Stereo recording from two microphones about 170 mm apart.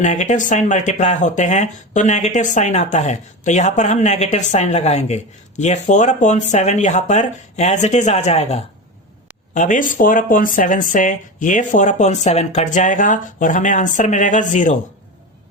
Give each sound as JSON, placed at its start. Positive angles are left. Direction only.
{"t": 0.0, "sound": "speech", "side_deg": 45}